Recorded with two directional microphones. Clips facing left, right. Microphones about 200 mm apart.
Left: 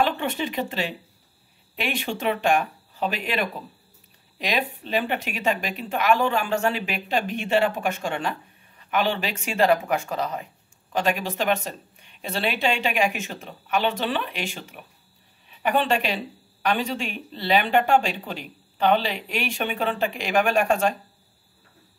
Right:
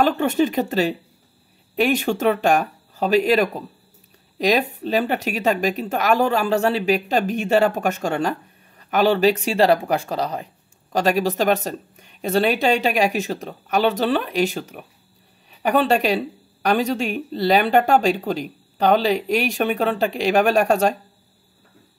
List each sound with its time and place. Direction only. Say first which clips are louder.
0.0 s speech: right 6 dB; 45° right (ahead or behind)